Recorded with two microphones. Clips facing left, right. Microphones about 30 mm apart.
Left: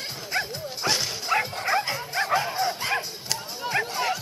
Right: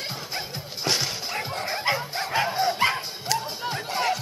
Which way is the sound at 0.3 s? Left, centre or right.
Centre.